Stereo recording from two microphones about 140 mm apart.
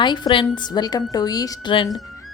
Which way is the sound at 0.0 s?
35° left (ahead or behind).